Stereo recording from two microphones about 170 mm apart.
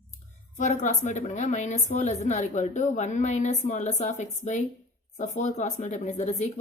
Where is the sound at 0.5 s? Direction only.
45° left (ahead or behind).